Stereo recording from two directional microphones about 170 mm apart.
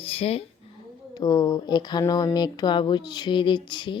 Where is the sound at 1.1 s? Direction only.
25° left (ahead or behind).